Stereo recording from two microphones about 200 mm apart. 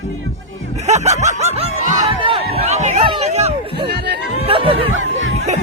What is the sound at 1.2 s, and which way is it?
Snicker, 35° right (ahead or behind).